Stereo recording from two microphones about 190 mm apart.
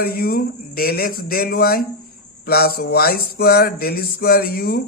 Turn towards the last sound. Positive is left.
turn(degrees=55)  # may be behind; listen again after turning